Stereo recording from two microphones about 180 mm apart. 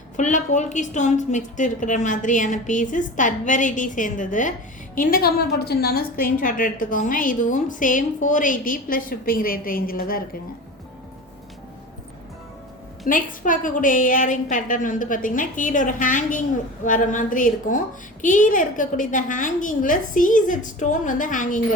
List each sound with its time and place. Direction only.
0.2 s a woman's voice: 40° left (ahead or behind)
13.1 s a woman's voice: 50° left (ahead or behind)